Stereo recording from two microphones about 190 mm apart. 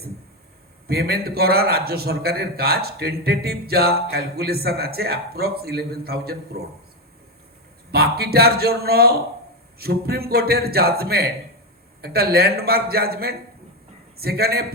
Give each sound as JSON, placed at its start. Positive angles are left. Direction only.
{"t": 0.9, "sound": "a man's voice", "side_deg": -55}
{"t": 7.9, "sound": "a man's voice", "side_deg": -55}